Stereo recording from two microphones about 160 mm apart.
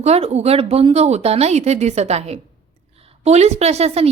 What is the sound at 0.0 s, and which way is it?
A woman's voice, 40° right (ahead or behind).